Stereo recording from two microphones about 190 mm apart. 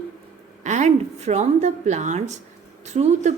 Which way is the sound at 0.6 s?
40° right (ahead or behind).